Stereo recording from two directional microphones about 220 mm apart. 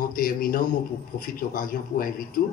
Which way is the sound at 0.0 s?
40° left (ahead or behind).